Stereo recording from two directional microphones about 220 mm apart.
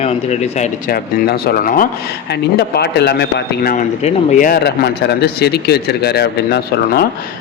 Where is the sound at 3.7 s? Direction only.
35° left (ahead or behind).